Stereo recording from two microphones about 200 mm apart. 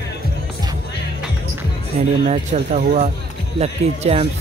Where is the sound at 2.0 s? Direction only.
35° right (ahead or behind).